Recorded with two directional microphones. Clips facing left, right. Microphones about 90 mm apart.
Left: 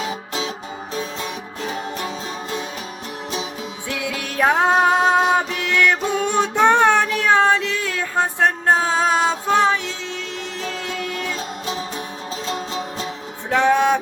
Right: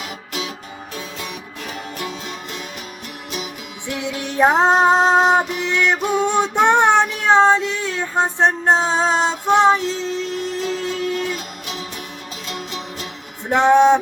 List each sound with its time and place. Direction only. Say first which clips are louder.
0.0 s music: left 3 dB; 25° left (ahead or behind)
1.7 s music: left 1 dB; 30° left (ahead or behind)
3.8 s music: right 3 dB; 25° right (ahead or behind)
11.2 s music: right 1 dB; 35° left (ahead or behind)
13.5 s a sound: right 4 dB; 25° right (ahead or behind)